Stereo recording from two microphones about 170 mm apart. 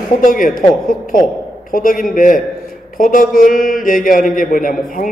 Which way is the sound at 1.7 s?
55° left (ahead or behind).